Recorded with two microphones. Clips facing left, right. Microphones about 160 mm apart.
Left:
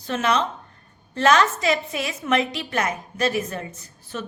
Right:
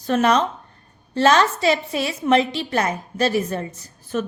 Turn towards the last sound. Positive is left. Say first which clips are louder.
# right 7 dB
turn(degrees=-35)  # may be behind; listen again after turning